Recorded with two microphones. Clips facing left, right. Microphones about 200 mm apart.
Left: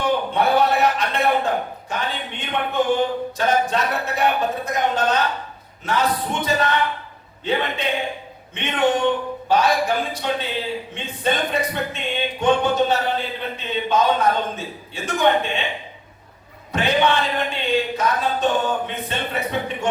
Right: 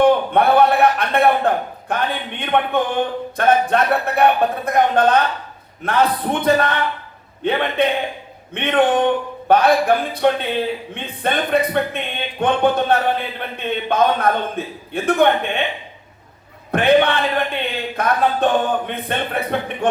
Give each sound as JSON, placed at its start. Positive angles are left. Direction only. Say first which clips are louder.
{"t": 0.0, "sound": "speech", "louder": "right 6 dB", "side_deg": -55}
{"t": 16.7, "sound": "speech", "louder": "right 5 dB", "side_deg": -55}